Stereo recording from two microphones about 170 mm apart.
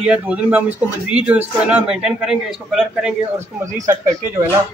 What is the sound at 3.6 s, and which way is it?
Speech, 20° right (ahead or behind).